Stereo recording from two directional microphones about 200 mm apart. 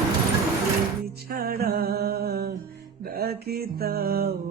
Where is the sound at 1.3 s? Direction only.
50° right (ahead or behind).